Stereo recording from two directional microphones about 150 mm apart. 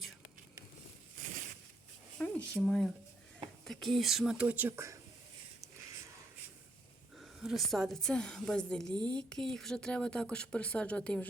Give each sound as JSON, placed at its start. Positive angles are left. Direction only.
{"t": 2.1, "sound": "a woman's voice", "side_deg": 5}
{"t": 7.2, "sound": "a woman's voice", "side_deg": 0}
{"t": 8.9, "sound": "speech", "side_deg": -30}
{"t": 9.1, "sound": "speech", "side_deg": 5}